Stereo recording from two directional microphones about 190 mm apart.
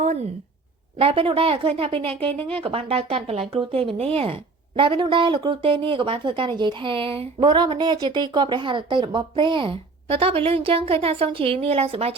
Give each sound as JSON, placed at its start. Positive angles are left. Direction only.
{"t": 0.9, "sound": "speech", "side_deg": -30}